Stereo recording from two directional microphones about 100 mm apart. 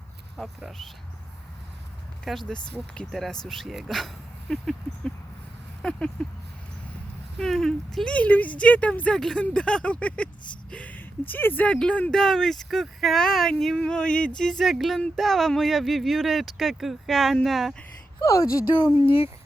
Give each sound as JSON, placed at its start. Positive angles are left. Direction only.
{"t": 0.3, "sound": "speech", "side_deg": 0}
{"t": 2.2, "sound": "speech", "side_deg": 5}
{"t": 18.9, "sound": "a sound", "side_deg": 65}